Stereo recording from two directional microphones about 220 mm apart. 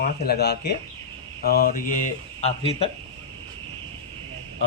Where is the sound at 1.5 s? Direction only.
40° left (ahead or behind).